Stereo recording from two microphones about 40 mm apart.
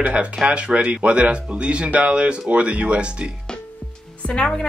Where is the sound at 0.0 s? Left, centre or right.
Right.